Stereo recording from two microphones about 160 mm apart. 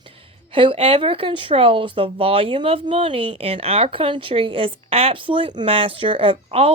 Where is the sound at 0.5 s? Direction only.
35° right (ahead or behind).